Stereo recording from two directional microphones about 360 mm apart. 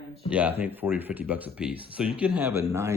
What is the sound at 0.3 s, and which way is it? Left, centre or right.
Speech, centre.